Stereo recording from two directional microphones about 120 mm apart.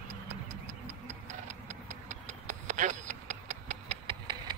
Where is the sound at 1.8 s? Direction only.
85° right.